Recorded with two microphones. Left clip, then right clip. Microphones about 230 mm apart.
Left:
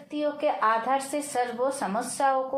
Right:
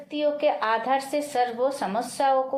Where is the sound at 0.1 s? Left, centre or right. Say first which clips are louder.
Right 3 dB; right.